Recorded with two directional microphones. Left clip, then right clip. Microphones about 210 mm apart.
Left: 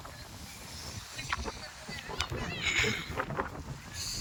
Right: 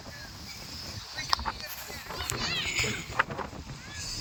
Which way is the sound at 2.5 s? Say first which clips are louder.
Even; 15° left (ahead or behind).